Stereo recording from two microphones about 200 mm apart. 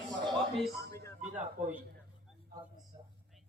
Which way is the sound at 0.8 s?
50° right (ahead or behind).